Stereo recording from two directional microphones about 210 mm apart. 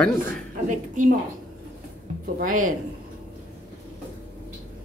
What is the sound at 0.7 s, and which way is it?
Speech, 35° right (ahead or behind).